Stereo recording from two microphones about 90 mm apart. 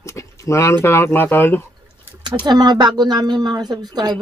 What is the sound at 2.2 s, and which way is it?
Speech, 55° right (ahead or behind).